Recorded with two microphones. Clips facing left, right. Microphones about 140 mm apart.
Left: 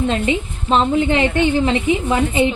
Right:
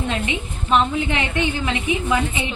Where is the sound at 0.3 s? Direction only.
30° left (ahead or behind).